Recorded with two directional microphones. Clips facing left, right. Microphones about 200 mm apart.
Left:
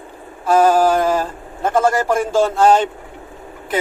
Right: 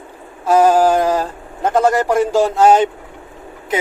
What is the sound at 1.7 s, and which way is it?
A man's voice, 20° right (ahead or behind).